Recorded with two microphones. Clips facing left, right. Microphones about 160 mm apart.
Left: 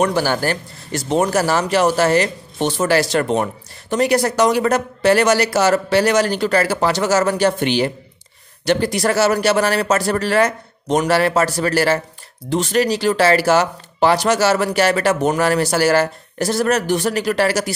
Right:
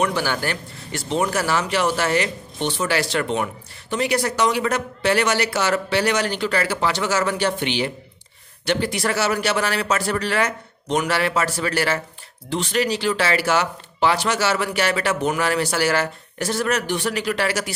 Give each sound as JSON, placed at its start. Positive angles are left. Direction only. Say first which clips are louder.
{"t": 0.0, "sound": "speech", "louder": "left 5 dB", "side_deg": 40}